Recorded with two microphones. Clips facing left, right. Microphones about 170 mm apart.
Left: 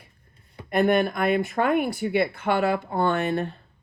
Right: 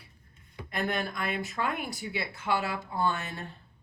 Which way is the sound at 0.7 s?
60° left (ahead or behind).